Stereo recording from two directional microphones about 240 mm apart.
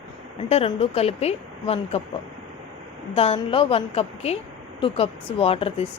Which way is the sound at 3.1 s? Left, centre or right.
Left.